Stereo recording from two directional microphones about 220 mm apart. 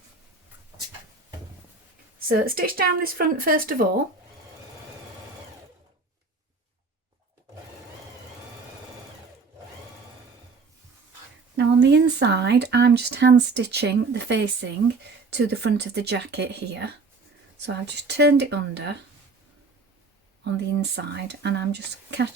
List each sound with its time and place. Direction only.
2.2 s speech: 40° right (ahead or behind)
11.5 s speech: 50° right (ahead or behind)
20.4 s speech: 50° right (ahead or behind)